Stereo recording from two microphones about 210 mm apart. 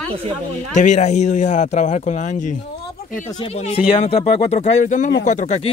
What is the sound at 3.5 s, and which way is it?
Speech, 30° left (ahead or behind).